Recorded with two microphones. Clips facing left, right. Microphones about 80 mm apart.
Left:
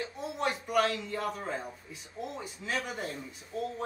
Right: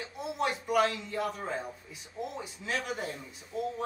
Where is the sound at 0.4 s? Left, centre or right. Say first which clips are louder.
Right 1 dB; centre.